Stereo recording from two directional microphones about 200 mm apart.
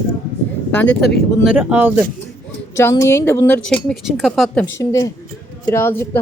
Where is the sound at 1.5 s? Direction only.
10° right (ahead or behind).